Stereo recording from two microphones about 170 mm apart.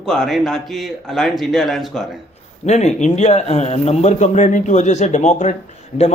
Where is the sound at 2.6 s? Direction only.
40° left (ahead or behind).